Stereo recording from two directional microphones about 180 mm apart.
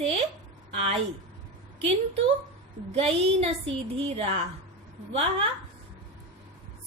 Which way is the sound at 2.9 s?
35° right (ahead or behind).